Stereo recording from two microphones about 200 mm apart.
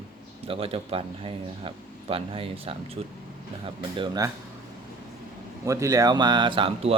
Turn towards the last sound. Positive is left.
turn(degrees=-25)  # may be behind; listen again after turning